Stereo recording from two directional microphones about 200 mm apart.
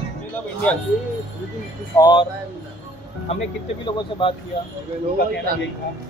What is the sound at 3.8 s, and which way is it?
Speech, 25° left (ahead or behind).